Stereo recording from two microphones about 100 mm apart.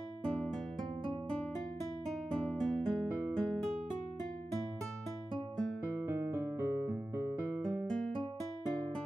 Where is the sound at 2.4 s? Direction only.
5° left (ahead or behind).